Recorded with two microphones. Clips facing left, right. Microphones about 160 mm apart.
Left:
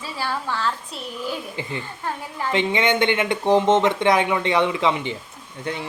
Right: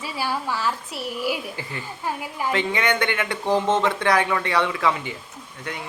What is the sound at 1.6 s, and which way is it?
Speech, 20° left (ahead or behind).